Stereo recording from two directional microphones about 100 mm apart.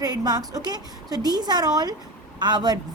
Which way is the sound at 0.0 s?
40° right (ahead or behind).